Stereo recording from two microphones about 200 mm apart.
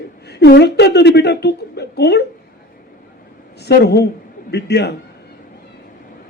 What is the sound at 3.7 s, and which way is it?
A man's voice, 55° left (ahead or behind).